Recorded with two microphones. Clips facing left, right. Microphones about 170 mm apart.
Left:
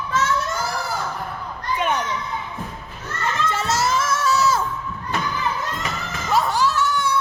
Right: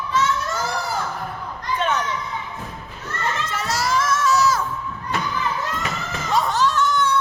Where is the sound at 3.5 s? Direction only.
25° left (ahead or behind).